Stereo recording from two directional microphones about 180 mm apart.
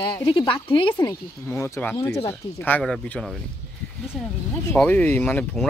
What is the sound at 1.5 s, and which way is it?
Speech, 15° left (ahead or behind).